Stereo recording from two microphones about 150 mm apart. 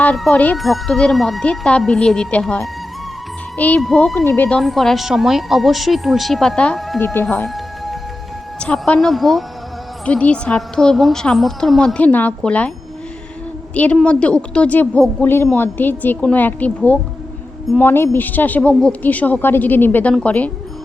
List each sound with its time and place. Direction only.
0.0 s speech: 10° left (ahead or behind)
3.8 s speech: centre (ahead or behind)
4.1 s speech: 15° left (ahead or behind)
4.4 s speech: 5° left (ahead or behind)
7.0 s speech: 15° left (ahead or behind)
7.3 s music: centre (ahead or behind)
8.5 s speech: 5° left (ahead or behind)
13.7 s speech: 10° left (ahead or behind)